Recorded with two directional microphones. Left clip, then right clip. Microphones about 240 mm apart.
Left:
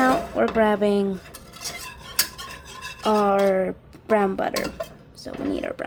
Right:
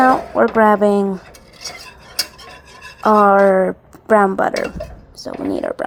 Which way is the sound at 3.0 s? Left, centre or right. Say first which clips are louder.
Right 9 dB; centre.